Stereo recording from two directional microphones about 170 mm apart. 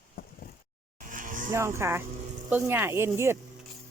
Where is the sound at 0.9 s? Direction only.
50° right (ahead or behind).